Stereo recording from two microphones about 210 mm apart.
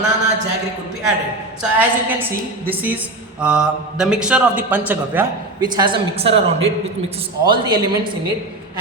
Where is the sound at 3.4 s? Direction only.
5° right (ahead or behind).